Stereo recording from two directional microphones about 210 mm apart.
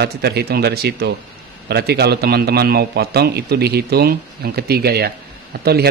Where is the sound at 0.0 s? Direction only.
50° right (ahead or behind).